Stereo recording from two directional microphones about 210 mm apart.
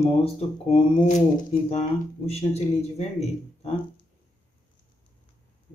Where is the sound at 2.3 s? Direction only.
30° left (ahead or behind).